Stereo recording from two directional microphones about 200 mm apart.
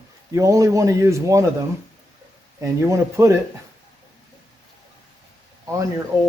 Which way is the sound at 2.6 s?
15° right (ahead or behind).